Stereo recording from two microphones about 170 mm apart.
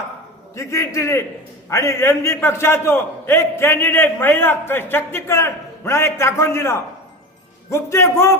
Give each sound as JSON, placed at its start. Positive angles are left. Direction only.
{"t": 0.5, "sound": "a man's voice", "side_deg": 15}